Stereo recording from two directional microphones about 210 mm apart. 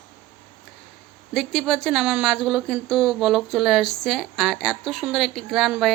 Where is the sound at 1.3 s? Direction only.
Centre (ahead or behind).